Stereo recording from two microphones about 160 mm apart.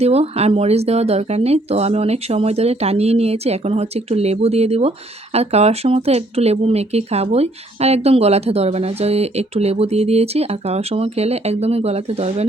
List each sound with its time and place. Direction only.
0.0 s speech: 40° right (ahead or behind)